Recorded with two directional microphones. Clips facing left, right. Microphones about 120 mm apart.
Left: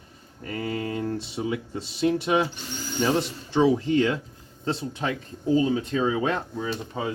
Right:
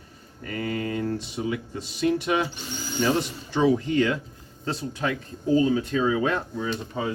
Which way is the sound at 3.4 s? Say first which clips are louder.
Left 1 dB; 25° left (ahead or behind).